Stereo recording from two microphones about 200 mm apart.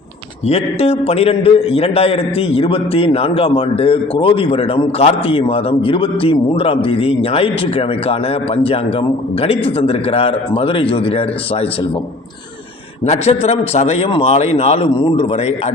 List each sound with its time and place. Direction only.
0.4 s a man's voice: 30° left (ahead or behind)
13.1 s speech: 35° left (ahead or behind)